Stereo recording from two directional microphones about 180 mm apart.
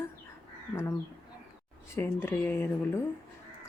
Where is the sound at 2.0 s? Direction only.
10° left (ahead or behind).